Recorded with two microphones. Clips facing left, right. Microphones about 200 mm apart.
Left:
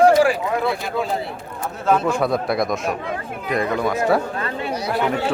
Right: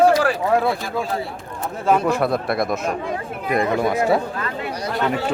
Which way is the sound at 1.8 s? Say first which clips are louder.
Right 1 dB; 5° right (ahead or behind).